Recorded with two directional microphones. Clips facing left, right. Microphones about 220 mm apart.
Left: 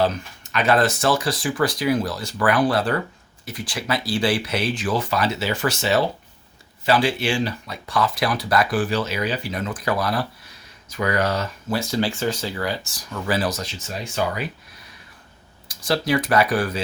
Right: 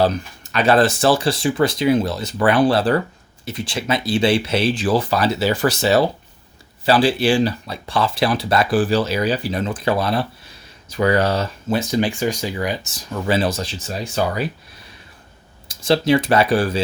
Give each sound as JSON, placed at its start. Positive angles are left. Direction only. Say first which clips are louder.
{"t": 0.5, "sound": "speech", "louder": "right 4 dB", "side_deg": -30}
{"t": 15.7, "sound": "speech", "louder": "right 5 dB", "side_deg": -25}